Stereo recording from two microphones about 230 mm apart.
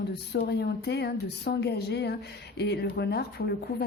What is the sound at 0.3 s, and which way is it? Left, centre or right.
Speech, left.